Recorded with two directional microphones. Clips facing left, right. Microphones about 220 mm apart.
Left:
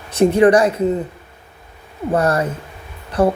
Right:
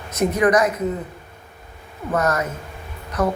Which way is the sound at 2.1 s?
30° left (ahead or behind).